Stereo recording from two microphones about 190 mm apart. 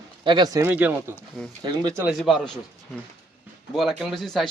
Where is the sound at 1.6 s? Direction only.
25° right (ahead or behind).